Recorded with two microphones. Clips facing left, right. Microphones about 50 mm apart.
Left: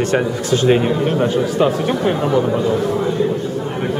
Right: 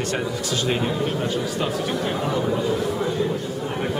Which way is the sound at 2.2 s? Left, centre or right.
Centre.